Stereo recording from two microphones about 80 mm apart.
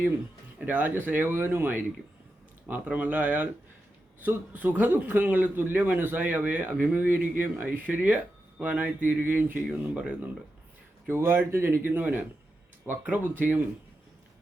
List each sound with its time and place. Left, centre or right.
0.6 s a man's voice: right
11.1 s a man's voice: right